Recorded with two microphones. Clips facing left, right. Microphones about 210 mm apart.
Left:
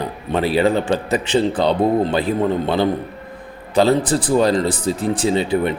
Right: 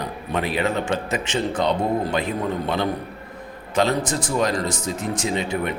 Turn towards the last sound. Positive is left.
turn(degrees=30)  # may be behind; listen again after turning